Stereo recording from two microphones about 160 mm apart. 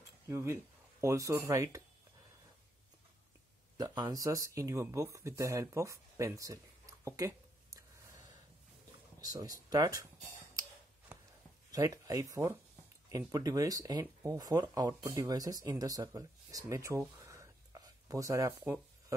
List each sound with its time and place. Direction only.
0.3 s speech: 20° right (ahead or behind)
3.7 s speech: 25° right (ahead or behind)
9.7 s speech: 20° right (ahead or behind)
11.7 s speech: 20° right (ahead or behind)